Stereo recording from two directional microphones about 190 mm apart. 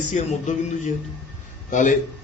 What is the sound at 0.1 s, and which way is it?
Speech, 40° left (ahead or behind).